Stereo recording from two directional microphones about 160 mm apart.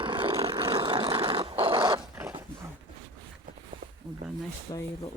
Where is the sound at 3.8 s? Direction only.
70° right (ahead or behind).